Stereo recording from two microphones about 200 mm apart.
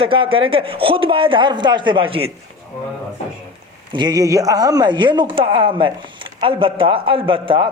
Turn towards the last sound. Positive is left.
turn(degrees=-25)  # may be behind; listen again after turning